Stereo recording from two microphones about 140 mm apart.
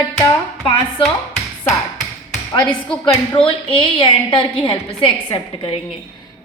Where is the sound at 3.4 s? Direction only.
35° left (ahead or behind).